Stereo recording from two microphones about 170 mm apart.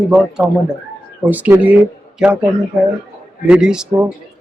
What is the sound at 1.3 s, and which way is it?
Speech, 10° right (ahead or behind).